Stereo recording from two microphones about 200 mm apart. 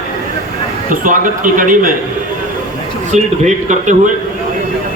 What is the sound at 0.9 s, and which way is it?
A man's voice, 40° right (ahead or behind).